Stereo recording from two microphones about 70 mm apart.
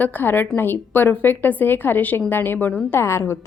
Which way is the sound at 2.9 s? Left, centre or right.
Left.